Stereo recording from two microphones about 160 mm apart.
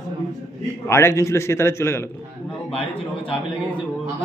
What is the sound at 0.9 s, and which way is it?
A man's voice, 15° left (ahead or behind).